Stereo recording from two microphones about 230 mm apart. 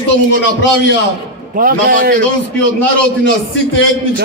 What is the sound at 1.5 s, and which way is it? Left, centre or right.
Speech, right.